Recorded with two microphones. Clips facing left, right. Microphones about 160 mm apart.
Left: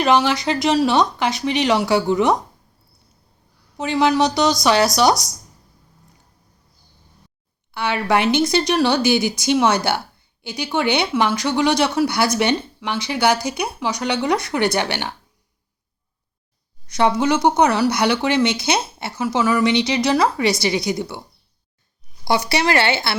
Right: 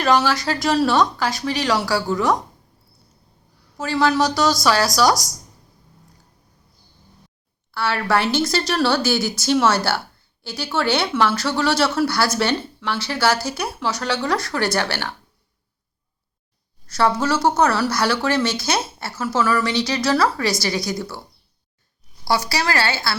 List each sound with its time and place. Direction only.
0.0 s speech: 20° left (ahead or behind)
3.8 s speech: 20° left (ahead or behind)
7.7 s speech: 20° left (ahead or behind)
16.8 s speech: 20° left (ahead or behind)